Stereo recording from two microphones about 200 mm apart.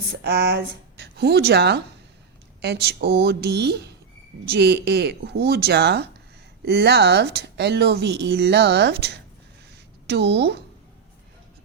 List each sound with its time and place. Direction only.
0.1 s speech: 55° right (ahead or behind)